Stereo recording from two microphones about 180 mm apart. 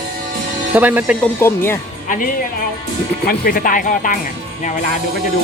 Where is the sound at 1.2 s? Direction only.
15° left (ahead or behind).